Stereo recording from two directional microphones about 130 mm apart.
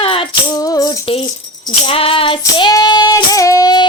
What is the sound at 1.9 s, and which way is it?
Child singing, 45° left (ahead or behind).